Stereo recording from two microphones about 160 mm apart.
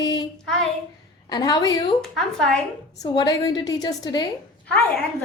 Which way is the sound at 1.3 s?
25° left (ahead or behind).